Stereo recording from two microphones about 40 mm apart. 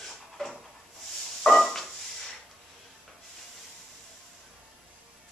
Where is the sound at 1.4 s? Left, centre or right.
Centre.